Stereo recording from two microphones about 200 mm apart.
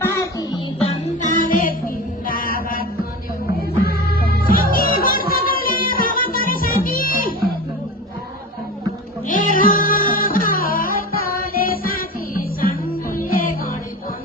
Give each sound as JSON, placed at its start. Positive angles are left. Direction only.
{"t": 0.0, "sound": "music", "side_deg": 15}
{"t": 0.8, "sound": "music", "side_deg": 30}
{"t": 1.4, "sound": "music", "side_deg": 40}
{"t": 2.2, "sound": "mantra", "side_deg": 45}
{"t": 4.3, "sound": "music", "side_deg": 45}
{"t": 9.2, "sound": "music", "side_deg": 40}